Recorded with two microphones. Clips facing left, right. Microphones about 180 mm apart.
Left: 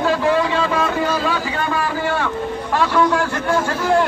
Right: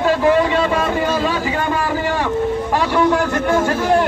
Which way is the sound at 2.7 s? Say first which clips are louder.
Even; 15° right (ahead or behind).